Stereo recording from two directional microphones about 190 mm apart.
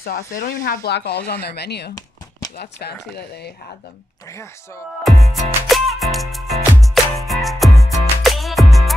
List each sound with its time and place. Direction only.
0.0 s speech: 50° left (ahead or behind)
0.8 s speech: 60° left (ahead or behind)
5.0 s music: centre (ahead or behind)